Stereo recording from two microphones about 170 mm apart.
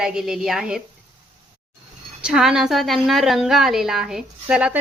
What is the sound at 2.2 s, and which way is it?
A woman's voice, 5° right (ahead or behind).